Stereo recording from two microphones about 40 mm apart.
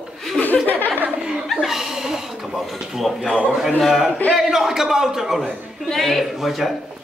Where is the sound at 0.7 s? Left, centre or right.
Left.